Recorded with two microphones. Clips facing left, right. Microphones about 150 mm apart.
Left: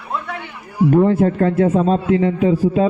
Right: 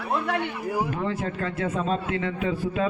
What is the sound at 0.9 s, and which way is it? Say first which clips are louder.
A man's voice: left 14 dB; 45° left (ahead or behind).